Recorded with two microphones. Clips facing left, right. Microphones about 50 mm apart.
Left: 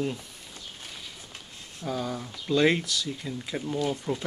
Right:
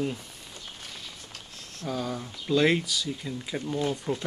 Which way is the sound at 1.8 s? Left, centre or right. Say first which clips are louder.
Even; centre.